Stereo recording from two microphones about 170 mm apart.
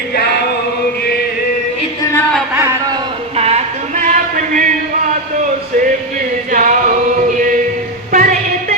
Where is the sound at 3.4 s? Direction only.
40° right (ahead or behind).